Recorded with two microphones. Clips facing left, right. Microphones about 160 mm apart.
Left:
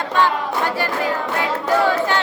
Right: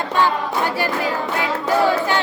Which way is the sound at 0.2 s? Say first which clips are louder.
Even; 10° right (ahead or behind).